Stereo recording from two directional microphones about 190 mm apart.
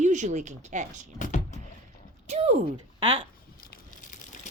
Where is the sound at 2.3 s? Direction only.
35° right (ahead or behind).